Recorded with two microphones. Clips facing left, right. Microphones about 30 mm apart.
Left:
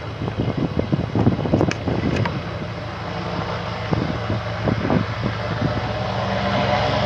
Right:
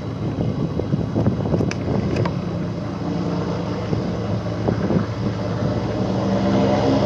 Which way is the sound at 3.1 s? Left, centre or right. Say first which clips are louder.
Right 2 dB; left.